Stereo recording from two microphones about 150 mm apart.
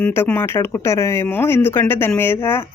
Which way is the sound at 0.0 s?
10° left (ahead or behind).